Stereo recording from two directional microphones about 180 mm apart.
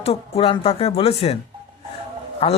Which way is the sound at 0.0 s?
30° left (ahead or behind).